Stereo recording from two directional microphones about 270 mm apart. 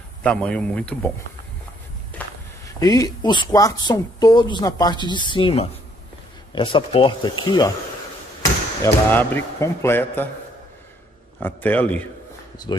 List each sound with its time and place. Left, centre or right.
0.2 s a man's voice: centre
2.2 s walk: centre
2.8 s speech: centre
8.8 s speech: centre
11.3 s a man's voice: centre